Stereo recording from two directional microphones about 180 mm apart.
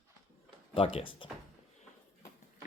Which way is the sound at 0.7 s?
30° left (ahead or behind).